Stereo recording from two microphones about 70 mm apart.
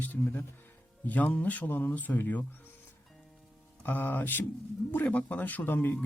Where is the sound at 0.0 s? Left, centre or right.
Left.